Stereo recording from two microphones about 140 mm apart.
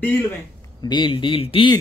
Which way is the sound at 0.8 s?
35° left (ahead or behind).